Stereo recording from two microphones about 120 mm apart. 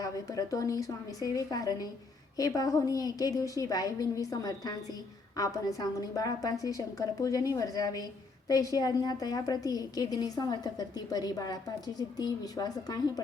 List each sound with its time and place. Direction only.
0.0 s a woman's voice: 30° left (ahead or behind)